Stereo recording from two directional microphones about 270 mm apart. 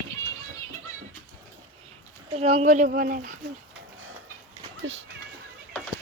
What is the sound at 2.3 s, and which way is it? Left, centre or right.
A child's voice, right.